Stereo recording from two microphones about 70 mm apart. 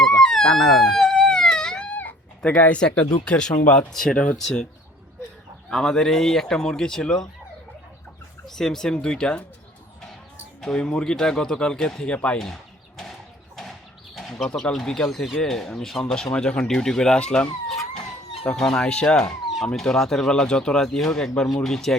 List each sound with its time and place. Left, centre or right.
0.2 s wail: centre
1.9 s cat: left
2.6 s speech: centre
5.7 s speech: centre
8.4 s speech: centre
10.6 s speech: centre
14.2 s speech: centre